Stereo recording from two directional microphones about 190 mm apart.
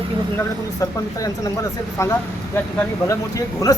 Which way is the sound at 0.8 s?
15° left (ahead or behind).